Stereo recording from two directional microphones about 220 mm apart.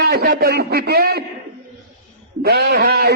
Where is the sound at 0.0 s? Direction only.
45° right (ahead or behind).